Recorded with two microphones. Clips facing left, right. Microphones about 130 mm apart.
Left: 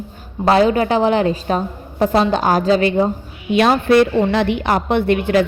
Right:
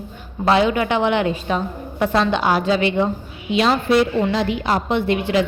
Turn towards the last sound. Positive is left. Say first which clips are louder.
# left 3 dB
turn(degrees=55)  # may be behind; listen again after turning